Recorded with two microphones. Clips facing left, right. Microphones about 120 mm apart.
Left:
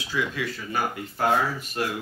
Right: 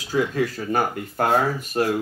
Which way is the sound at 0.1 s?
45° right (ahead or behind).